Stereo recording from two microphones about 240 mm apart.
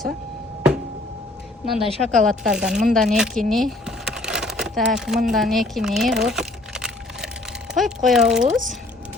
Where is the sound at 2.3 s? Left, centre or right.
Centre.